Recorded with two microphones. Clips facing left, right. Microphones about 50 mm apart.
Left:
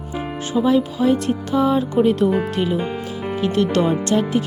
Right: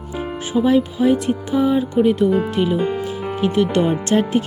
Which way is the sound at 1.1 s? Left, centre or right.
Centre.